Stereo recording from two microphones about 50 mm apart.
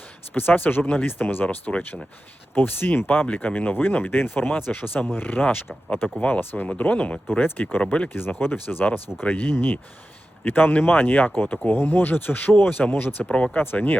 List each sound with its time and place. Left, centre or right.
0.3 s speech: left
1.5 s speech: left
6.7 s speech: left
7.8 s speech: left
8.3 s speech: left
11.7 s speech: left
13.2 s speech: left
13.6 s speech: left